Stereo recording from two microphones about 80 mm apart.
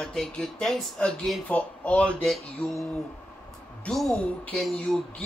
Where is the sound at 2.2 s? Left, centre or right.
Centre.